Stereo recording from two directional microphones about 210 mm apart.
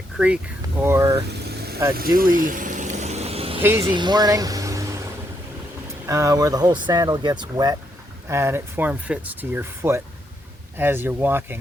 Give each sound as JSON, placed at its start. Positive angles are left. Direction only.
{"t": 0.8, "sound": "speech", "side_deg": -15}
{"t": 1.3, "sound": "vehicle", "side_deg": -50}
{"t": 3.6, "sound": "speech", "side_deg": -10}
{"t": 6.1, "sound": "speech", "side_deg": -15}